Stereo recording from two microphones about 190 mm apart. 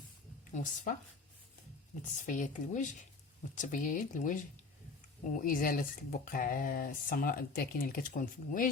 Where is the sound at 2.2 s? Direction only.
40° left (ahead or behind).